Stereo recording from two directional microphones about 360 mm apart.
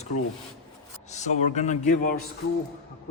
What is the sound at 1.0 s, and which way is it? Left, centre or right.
Speech, centre.